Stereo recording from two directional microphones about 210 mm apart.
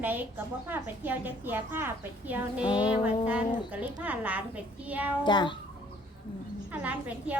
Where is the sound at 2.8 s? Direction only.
5° right (ahead or behind).